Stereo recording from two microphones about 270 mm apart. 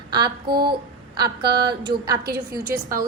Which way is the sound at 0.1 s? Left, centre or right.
Centre.